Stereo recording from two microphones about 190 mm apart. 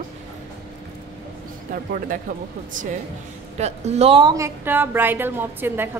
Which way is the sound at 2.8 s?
45° right (ahead or behind).